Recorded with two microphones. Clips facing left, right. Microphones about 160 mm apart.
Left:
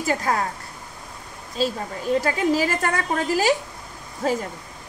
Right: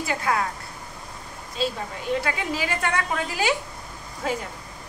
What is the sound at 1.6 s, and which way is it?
A woman's voice, 40° left (ahead or behind).